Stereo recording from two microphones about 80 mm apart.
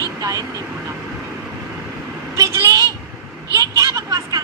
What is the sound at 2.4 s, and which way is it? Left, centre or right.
A woman's voice, right.